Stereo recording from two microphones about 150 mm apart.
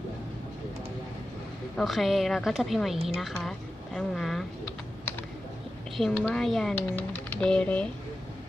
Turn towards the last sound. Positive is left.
turn(degrees=10)  # may be behind; listen again after turning